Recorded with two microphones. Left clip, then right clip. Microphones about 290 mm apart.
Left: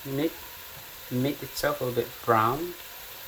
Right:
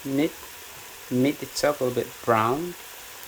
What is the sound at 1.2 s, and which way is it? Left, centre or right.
Speech, right.